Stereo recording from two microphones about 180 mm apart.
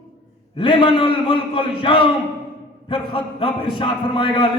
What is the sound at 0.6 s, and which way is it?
A man's voice, 30° left (ahead or behind).